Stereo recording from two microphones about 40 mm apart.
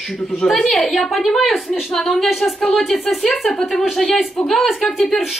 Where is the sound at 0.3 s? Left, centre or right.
Centre.